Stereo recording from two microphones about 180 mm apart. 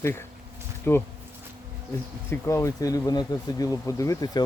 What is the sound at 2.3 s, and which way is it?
Speech, 15° left (ahead or behind).